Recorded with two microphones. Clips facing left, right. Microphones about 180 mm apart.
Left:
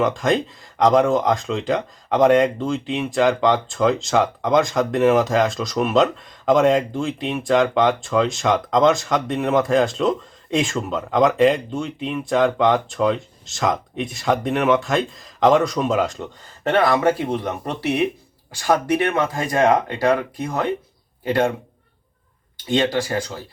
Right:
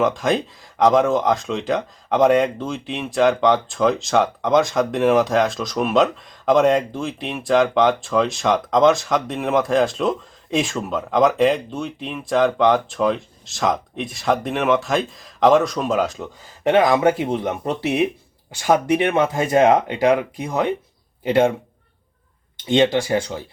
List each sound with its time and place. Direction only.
0.0 s speech: centre (ahead or behind)
16.6 s speech: 15° right (ahead or behind)
22.6 s speech: 20° right (ahead or behind)